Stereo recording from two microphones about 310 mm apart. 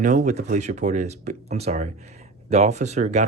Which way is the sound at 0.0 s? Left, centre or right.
Right.